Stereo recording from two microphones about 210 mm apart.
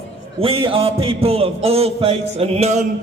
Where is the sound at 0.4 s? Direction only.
25° right (ahead or behind).